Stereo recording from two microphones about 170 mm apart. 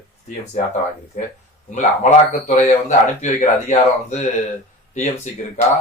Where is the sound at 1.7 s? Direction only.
45° left (ahead or behind).